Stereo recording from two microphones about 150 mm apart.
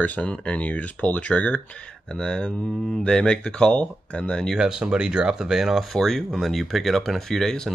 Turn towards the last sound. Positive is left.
turn(degrees=0)  # may be behind; listen again after turning